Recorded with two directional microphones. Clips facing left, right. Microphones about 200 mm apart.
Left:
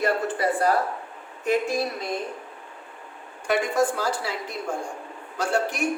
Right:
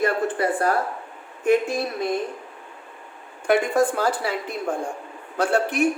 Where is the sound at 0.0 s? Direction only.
50° right (ahead or behind).